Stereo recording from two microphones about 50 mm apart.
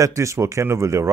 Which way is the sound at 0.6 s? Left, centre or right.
Right.